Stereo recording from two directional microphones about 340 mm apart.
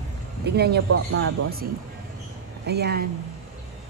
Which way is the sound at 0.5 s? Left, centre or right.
Right.